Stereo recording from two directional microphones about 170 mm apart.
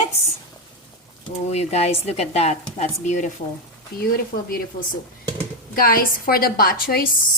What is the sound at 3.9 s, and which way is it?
Speech, 60° left (ahead or behind).